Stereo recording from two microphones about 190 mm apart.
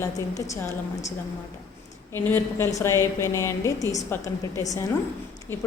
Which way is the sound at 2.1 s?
10° left (ahead or behind).